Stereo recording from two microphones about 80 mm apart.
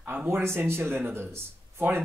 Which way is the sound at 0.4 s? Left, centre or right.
Right.